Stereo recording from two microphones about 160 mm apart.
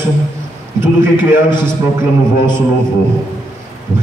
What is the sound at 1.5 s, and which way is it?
Speech, 25° left (ahead or behind).